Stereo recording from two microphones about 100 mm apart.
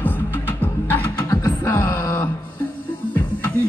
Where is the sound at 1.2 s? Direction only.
35° left (ahead or behind).